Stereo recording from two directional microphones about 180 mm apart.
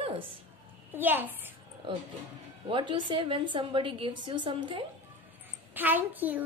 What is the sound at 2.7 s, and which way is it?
A woman's voice, 25° right (ahead or behind).